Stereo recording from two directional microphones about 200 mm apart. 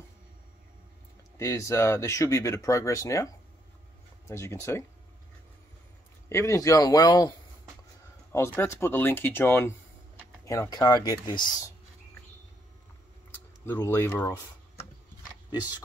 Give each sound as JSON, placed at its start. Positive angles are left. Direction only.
{"t": 1.4, "sound": "speech", "side_deg": 15}
{"t": 4.3, "sound": "speech", "side_deg": 15}
{"t": 6.2, "sound": "speech", "side_deg": 15}
{"t": 13.7, "sound": "speech", "side_deg": 10}